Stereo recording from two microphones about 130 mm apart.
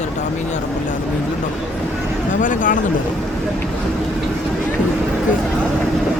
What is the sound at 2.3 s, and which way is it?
Speech, 80° left.